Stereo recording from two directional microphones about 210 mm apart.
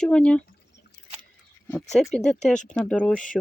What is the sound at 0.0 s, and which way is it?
Speech, 5° left (ahead or behind).